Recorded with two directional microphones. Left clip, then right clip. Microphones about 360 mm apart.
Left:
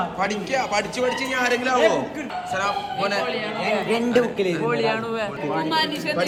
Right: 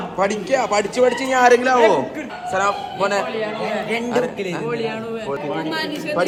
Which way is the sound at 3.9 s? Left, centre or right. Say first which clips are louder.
Even; centre.